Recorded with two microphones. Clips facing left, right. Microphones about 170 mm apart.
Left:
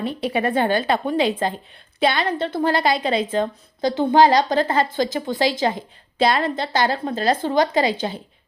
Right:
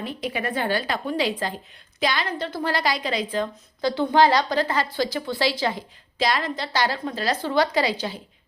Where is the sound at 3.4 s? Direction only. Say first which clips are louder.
Left 3 dB; 45° left (ahead or behind).